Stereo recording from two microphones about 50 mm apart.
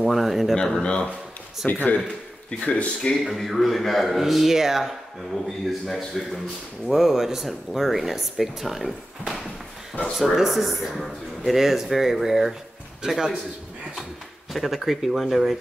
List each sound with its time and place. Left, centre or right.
0.0 s speech: centre
0.7 s speech: centre
1.7 s speech: left
2.6 s speech: centre
3.1 s a man's voice: centre
14.5 s speech: centre